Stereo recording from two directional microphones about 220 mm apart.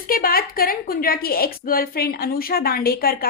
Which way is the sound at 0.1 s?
40° left (ahead or behind).